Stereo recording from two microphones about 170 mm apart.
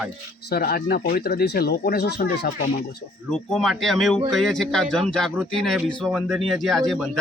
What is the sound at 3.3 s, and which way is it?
A man's voice, 5° left (ahead or behind).